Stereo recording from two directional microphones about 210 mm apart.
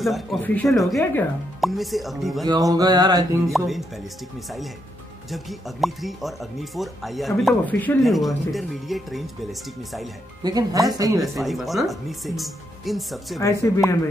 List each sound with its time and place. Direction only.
0.0 s speech: centre (ahead or behind)
2.4 s a sound: 20° right (ahead or behind)
3.5 s speech: centre (ahead or behind)
5.3 s speech: centre (ahead or behind)
10.4 s a sound: 20° right (ahead or behind)
11.3 s speech: centre (ahead or behind)
13.4 s speech: 15° left (ahead or behind)